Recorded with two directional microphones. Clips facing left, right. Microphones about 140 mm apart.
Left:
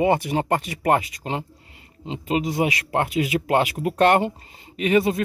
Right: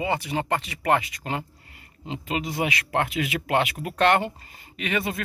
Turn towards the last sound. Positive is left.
turn(degrees=35)  # may be behind; listen again after turning